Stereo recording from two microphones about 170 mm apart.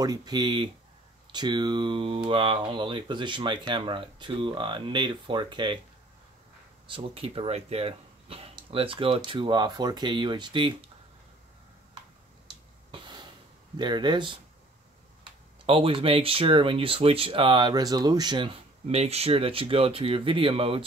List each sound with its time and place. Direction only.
0.0 s speech: 25° right (ahead or behind)
6.9 s speech: 35° right (ahead or behind)
12.9 s a sound: 25° right (ahead or behind)
13.7 s speech: 25° right (ahead or behind)